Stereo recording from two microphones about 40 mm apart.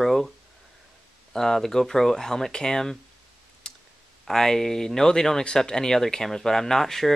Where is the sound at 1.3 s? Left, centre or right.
Centre.